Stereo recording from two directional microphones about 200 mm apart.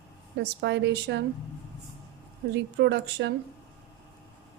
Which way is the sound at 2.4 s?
55° right (ahead or behind).